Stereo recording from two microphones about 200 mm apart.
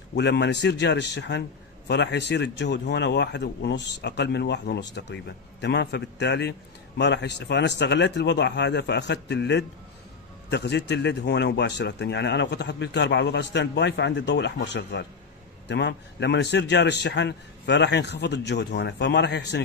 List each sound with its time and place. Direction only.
0.1 s speech: 60° left (ahead or behind)